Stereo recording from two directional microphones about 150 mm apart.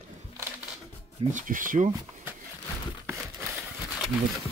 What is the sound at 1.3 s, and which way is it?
Speech, 60° right (ahead or behind).